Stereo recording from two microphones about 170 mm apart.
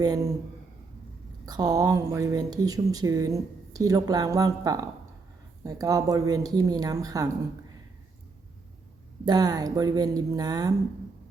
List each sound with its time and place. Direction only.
0.0 s speech: 20° right (ahead or behind)
1.5 s speech: 20° right (ahead or behind)
9.2 s speech: 25° right (ahead or behind)